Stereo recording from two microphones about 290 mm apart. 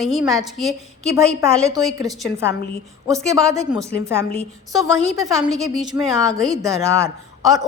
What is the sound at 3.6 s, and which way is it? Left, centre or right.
Speech, centre.